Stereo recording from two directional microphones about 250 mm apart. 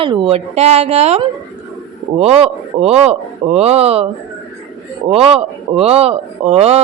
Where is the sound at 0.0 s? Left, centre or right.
Right.